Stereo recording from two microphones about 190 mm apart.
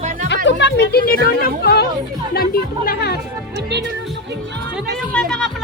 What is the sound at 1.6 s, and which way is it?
Chatter, 60° left (ahead or behind).